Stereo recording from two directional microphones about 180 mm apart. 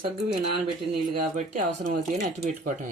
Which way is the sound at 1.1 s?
50° right (ahead or behind).